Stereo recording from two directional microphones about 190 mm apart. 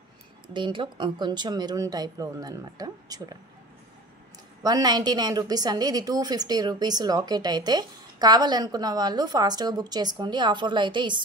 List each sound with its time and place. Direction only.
0.5 s a woman's voice: 25° right (ahead or behind)
4.6 s a woman's voice: 20° right (ahead or behind)